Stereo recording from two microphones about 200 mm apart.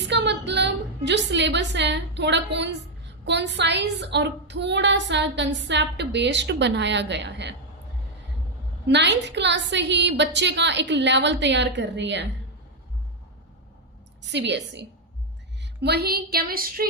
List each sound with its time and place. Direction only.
0.1 s a woman's voice: 60° right (ahead or behind)
8.9 s a woman's voice: 60° right (ahead or behind)
14.2 s a woman's voice: 60° right (ahead or behind)